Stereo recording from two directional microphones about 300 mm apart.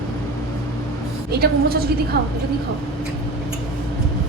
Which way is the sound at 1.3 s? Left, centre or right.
Right.